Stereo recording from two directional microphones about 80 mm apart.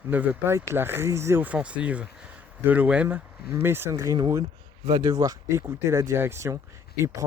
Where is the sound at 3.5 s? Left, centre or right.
Right.